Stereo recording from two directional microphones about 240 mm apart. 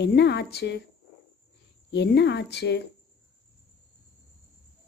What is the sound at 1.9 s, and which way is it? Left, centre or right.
Speech, left.